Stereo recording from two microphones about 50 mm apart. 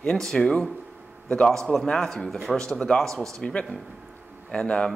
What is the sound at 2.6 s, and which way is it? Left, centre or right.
Speech, centre.